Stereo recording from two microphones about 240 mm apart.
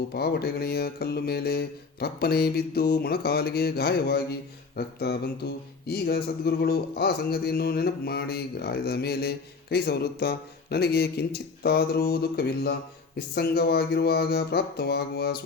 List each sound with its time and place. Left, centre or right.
0.1 s a man's voice: left